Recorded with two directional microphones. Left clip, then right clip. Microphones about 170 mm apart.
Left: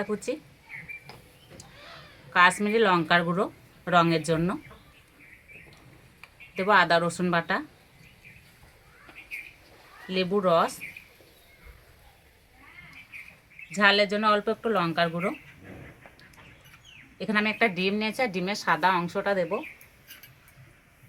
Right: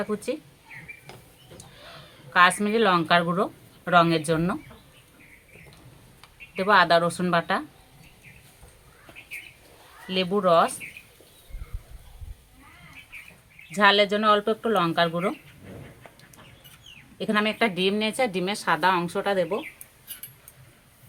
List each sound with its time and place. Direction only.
0.0 s speech: 20° left (ahead or behind)
2.3 s speech: 20° left (ahead or behind)
6.6 s speech: 20° left (ahead or behind)
10.1 s speech: 20° left (ahead or behind)
13.7 s speech: 10° right (ahead or behind)
17.2 s a woman's voice: 10° right (ahead or behind)